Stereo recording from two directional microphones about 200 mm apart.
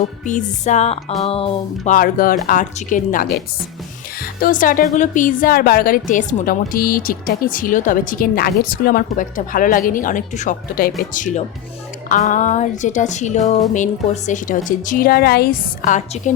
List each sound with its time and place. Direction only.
0.3 s a woman's voice: 40° left (ahead or behind)